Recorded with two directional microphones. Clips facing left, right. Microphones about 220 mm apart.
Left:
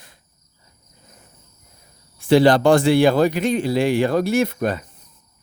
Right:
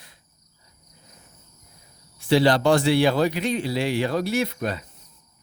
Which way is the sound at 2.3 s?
50° left (ahead or behind).